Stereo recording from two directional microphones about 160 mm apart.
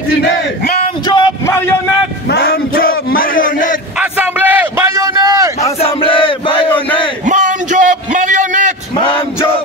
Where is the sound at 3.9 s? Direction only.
10° right (ahead or behind).